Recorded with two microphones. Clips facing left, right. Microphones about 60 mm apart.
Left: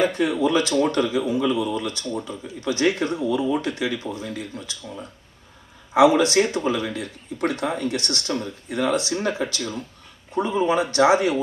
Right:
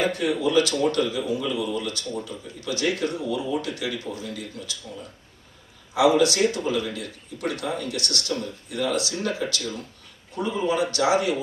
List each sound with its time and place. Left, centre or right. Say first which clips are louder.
0.0 s speech: left 3 dB; left